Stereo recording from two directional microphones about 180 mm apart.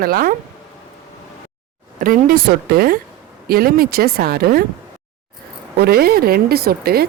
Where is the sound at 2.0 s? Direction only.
50° right (ahead or behind).